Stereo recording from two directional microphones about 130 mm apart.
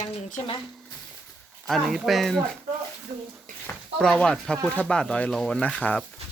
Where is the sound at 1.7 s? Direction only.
Centre (ahead or behind).